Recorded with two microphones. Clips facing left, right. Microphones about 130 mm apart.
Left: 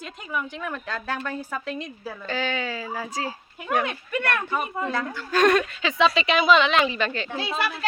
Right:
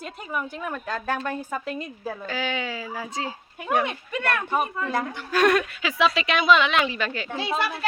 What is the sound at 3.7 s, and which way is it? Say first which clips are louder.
A woman's voice: even; centre (ahead or behind).